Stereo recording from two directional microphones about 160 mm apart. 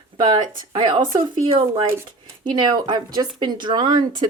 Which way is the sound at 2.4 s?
25° right (ahead or behind).